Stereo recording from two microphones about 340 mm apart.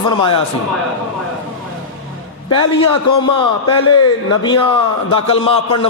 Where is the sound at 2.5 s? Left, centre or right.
Centre.